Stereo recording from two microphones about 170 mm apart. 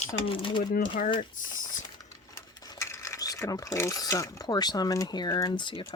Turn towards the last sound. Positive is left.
turn(degrees=30)  # may be behind; listen again after turning